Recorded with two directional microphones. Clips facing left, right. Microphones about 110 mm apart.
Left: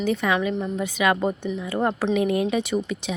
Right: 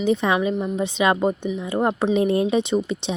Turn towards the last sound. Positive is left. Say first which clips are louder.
# right 3 dB
turn(degrees=-25)  # may be behind; listen again after turning